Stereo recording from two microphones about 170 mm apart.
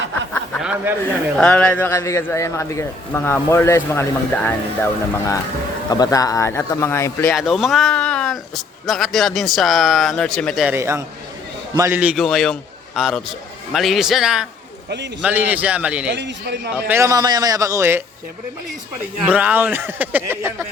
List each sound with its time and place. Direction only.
0.5 s a sound: 5° right (ahead or behind)
1.4 s a man's voice: 5° left (ahead or behind)
7.3 s speech: centre (ahead or behind)
10.7 s speech: 15° right (ahead or behind)
16.1 s a man's voice: 90° right
16.9 s a man's voice: 20° right (ahead or behind)
19.2 s speech: 5° right (ahead or behind)